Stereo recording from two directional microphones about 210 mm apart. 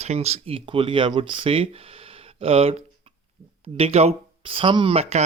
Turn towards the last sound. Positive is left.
turn(degrees=-30)  # may be behind; listen again after turning